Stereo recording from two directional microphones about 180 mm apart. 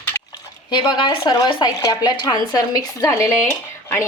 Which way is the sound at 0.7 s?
25° left (ahead or behind).